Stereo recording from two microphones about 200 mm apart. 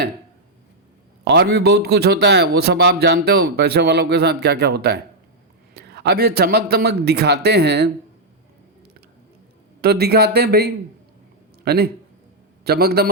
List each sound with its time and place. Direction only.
1.2 s a man's voice: 55° right (ahead or behind)
9.8 s a man's voice: 50° right (ahead or behind)